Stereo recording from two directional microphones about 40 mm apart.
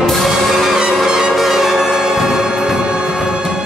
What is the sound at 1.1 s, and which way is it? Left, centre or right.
Music, centre.